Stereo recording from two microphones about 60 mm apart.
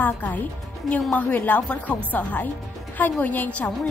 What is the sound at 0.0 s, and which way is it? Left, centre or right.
A woman's voice, left.